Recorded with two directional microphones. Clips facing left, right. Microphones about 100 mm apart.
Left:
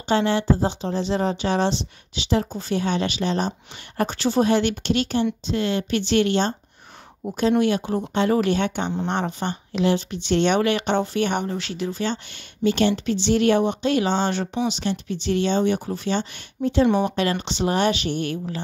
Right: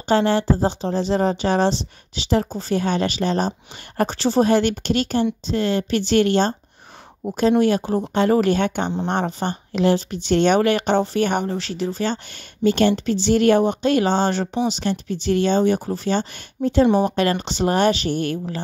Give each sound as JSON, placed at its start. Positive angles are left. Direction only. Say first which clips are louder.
{"t": 0.1, "sound": "speech", "louder": "right 2 dB", "side_deg": -40}